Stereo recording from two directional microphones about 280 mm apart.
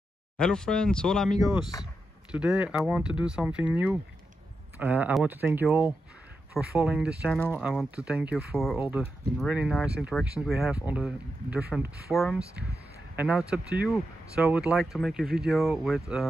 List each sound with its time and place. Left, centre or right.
0.4 s speech: centre
1.6 s speech: centre
2.3 s speech: centre